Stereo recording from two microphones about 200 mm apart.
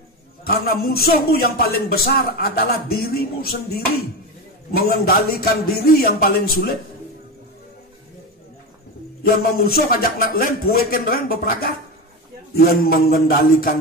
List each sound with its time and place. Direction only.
0.4 s a man's voice: 50° left (ahead or behind)
9.2 s a man's voice: 45° left (ahead or behind)